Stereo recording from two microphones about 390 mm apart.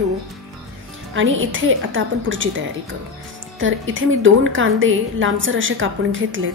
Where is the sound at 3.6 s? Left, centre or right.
Right.